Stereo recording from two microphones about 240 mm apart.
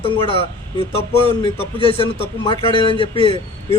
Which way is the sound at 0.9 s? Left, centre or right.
Left.